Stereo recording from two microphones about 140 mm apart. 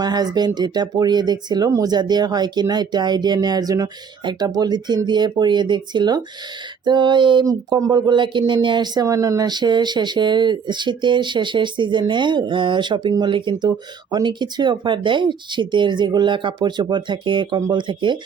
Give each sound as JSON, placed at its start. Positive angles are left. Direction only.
{"t": 0.0, "sound": "speech", "side_deg": -30}